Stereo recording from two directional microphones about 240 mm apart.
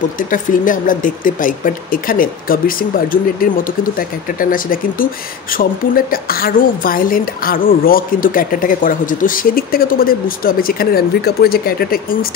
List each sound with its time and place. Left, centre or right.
0.3 s a woman's voice: left